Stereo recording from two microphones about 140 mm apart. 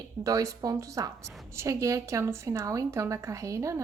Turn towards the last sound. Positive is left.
turn(degrees=-20)  # may be behind; listen again after turning